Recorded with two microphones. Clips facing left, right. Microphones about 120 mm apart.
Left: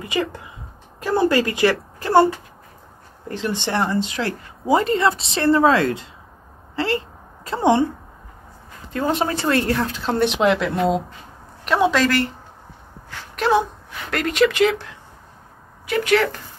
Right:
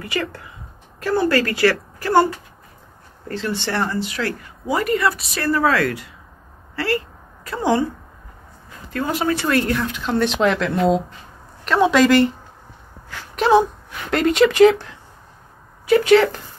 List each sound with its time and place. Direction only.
0.0 s speech: 15° left (ahead or behind)
3.3 s speech: 20° left (ahead or behind)
6.7 s a sound: 20° left (ahead or behind)
8.9 s speech: 25° left (ahead or behind)
10.2 s a woman's voice: 15° left (ahead or behind)
11.9 s speech: 15° right (ahead or behind)
13.4 s speech: 20° right (ahead or behind)
15.9 s speech: 30° right (ahead or behind)